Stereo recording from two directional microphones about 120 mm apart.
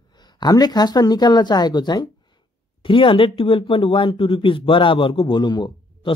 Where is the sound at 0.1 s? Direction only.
35° left (ahead or behind).